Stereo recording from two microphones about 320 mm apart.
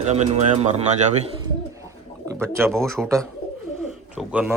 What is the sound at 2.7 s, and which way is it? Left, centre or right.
Speech, centre.